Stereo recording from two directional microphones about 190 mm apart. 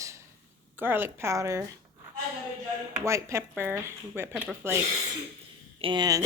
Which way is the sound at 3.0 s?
15° right (ahead or behind).